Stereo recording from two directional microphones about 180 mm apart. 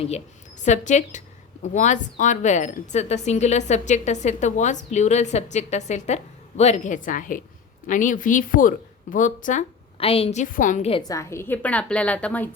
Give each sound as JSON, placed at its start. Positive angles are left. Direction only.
{"t": 0.6, "sound": "a woman's voice", "side_deg": 40}
{"t": 10.9, "sound": "a woman's voice", "side_deg": 20}